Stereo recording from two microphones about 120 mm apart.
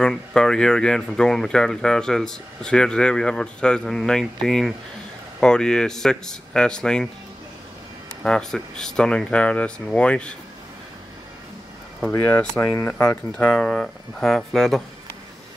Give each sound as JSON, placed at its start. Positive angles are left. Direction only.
{"t": 0.0, "sound": "speech", "side_deg": 5}
{"t": 8.2, "sound": "speech", "side_deg": 5}
{"t": 12.1, "sound": "speech", "side_deg": 15}
{"t": 13.4, "sound": "speech", "side_deg": 5}